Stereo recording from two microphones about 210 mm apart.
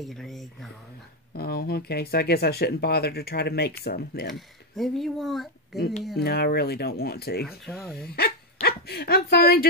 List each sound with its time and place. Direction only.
0.0 s speech: centre (ahead or behind)
1.3 s speech: 45° left (ahead or behind)
4.3 s speech: centre (ahead or behind)
6.1 s speech: 50° left (ahead or behind)
7.4 s speech: centre (ahead or behind)
8.1 s speech: 45° left (ahead or behind)